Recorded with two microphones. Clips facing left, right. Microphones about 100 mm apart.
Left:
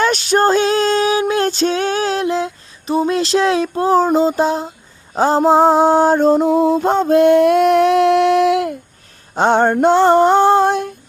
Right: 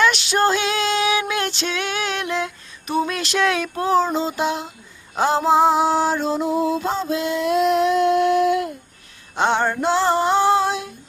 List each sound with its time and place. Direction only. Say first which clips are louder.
0.0 s female singing: left 4 dB; 45° left (ahead or behind)
5.1 s mantra: left 5 dB; 40° left (ahead or behind); by 8.7 s 80° left
9.3 s a sound: left 6 dB; 45° left (ahead or behind)
9.7 s female singing: left 8 dB; 50° left (ahead or behind)